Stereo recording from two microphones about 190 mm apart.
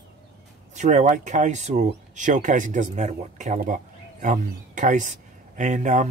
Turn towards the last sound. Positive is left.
turn(degrees=-40)  # may be behind; listen again after turning